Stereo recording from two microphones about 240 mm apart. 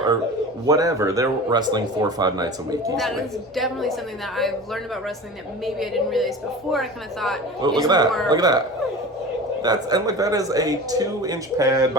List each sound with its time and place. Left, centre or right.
0.7 s speech: centre
2.9 s a woman's voice: centre
7.6 s speech: centre
9.6 s speech: centre